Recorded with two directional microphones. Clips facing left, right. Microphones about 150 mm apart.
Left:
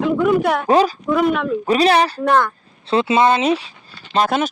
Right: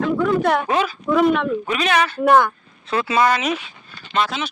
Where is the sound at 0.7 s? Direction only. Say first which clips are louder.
Left 6 dB; 35° left (ahead or behind).